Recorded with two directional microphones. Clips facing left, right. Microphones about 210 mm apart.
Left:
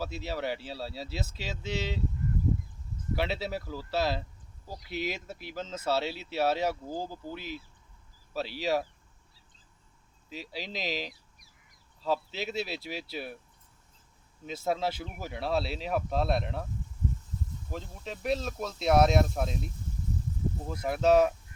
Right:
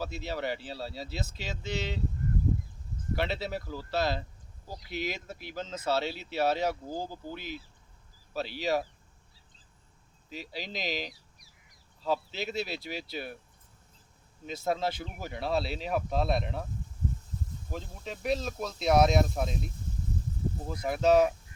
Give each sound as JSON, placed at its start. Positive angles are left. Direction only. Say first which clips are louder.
{"t": 0.0, "sound": "speech", "louder": "even", "side_deg": 5}
{"t": 3.2, "sound": "speech", "louder": "even", "side_deg": 5}
{"t": 10.2, "sound": "speech", "louder": "even", "side_deg": 0}
{"t": 11.1, "sound": "a sound", "louder": "right 1 dB", "side_deg": 50}
{"t": 12.0, "sound": "speech", "louder": "even", "side_deg": 0}
{"t": 14.4, "sound": "speech", "louder": "even", "side_deg": 5}
{"t": 17.7, "sound": "speech", "louder": "even", "side_deg": 0}
{"t": 20.7, "sound": "speech", "louder": "even", "side_deg": 0}